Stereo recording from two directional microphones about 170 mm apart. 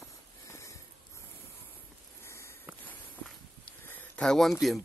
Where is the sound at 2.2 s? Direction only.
15° left (ahead or behind).